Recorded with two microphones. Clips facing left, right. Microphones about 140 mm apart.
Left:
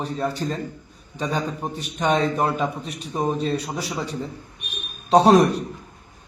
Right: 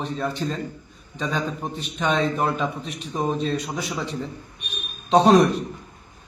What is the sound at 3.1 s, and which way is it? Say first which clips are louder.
A man's voice: left 1 dB; 5° left (ahead or behind).